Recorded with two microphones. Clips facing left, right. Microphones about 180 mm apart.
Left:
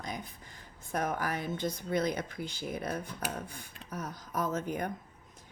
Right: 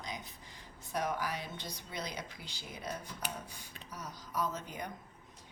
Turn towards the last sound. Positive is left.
turn(degrees=50)  # may be behind; listen again after turning